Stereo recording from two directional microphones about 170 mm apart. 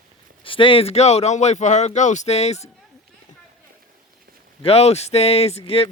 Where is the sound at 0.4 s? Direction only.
30° left (ahead or behind).